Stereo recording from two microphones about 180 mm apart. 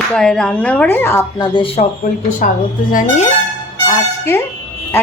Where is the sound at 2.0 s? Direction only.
45° left (ahead or behind).